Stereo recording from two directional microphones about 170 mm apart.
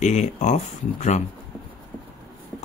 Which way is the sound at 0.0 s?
45° left (ahead or behind).